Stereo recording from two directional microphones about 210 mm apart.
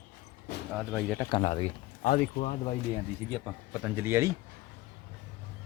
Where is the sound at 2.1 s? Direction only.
40° left (ahead or behind).